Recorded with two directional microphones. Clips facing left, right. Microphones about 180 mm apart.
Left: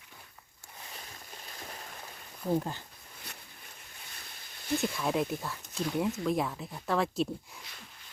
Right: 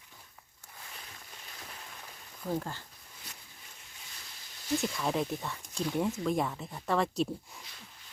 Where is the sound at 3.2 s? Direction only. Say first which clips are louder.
Left 3 dB; 60° left (ahead or behind).